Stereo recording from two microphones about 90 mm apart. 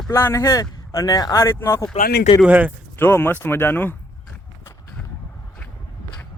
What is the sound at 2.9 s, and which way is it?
Speech, 25° left (ahead or behind).